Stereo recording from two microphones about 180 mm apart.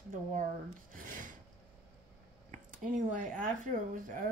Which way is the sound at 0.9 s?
50° right (ahead or behind).